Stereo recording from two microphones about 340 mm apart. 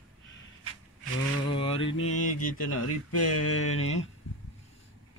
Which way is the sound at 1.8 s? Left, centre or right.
Left.